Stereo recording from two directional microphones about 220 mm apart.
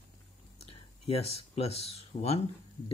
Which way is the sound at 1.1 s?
30° left (ahead or behind).